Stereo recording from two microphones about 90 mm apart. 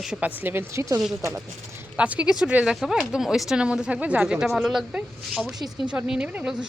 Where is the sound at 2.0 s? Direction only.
15° right (ahead or behind).